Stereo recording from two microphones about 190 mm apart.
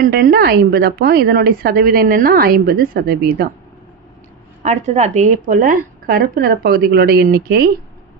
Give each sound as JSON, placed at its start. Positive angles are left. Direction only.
{"t": 0.0, "sound": "a woman's voice", "side_deg": -50}
{"t": 4.6, "sound": "a woman's voice", "side_deg": -35}